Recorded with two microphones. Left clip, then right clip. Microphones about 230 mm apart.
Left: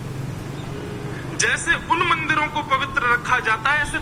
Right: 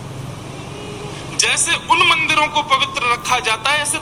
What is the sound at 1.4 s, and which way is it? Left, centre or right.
Speech, right.